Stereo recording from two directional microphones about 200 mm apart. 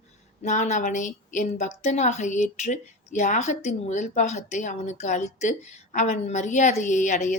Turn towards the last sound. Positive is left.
turn(degrees=35)  # may be behind; listen again after turning